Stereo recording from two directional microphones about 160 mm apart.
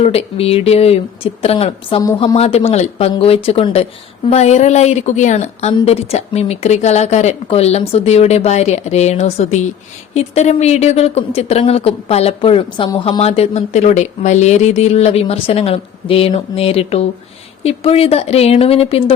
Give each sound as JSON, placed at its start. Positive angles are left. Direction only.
{"t": 0.0, "sound": "a woman's voice", "side_deg": 40}